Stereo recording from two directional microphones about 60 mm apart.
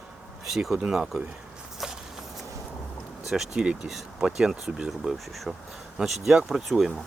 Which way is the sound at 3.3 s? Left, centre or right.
Centre.